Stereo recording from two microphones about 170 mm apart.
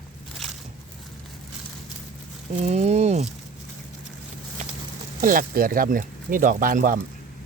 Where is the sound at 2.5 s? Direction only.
40° right (ahead or behind).